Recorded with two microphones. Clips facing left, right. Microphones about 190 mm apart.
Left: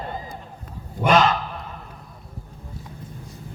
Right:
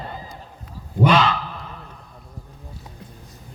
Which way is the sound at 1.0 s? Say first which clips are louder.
Left 1 dB; 45° left (ahead or behind).